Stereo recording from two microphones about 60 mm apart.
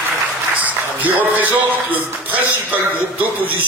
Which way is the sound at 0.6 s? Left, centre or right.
Right.